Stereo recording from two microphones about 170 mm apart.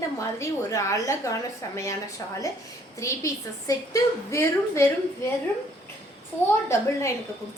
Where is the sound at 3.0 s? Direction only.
20° left (ahead or behind).